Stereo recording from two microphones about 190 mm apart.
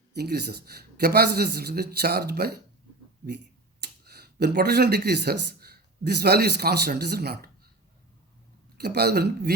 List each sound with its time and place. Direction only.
0.1 s a man's voice: 60° right (ahead or behind)
8.8 s a man's voice: 60° right (ahead or behind)